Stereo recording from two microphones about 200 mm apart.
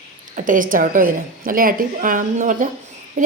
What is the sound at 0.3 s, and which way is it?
A woman's voice, 40° right (ahead or behind).